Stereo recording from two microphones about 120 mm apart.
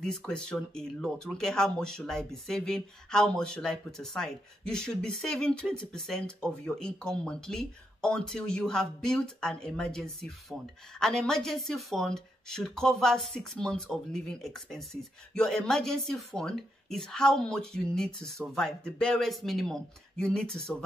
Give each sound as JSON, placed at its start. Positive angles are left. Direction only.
{"t": 0.0, "sound": "speech", "side_deg": 5}